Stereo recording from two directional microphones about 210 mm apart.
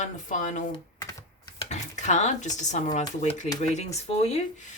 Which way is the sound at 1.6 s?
35° left (ahead or behind).